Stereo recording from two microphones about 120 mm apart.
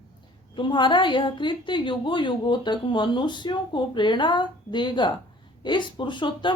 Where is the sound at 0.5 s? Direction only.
40° left (ahead or behind).